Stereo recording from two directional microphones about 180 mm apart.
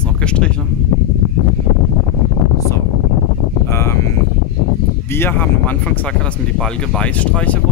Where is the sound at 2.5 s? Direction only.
15° left (ahead or behind).